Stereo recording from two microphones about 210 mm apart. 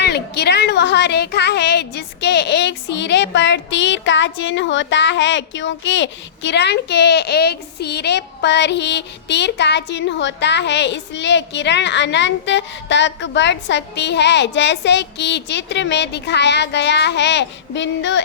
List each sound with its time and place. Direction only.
0.0 s speech: 50° left (ahead or behind)